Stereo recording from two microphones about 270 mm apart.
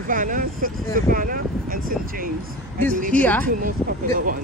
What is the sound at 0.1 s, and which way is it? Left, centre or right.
Speech, right.